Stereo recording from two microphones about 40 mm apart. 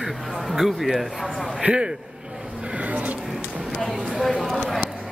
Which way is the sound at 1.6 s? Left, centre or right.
Right.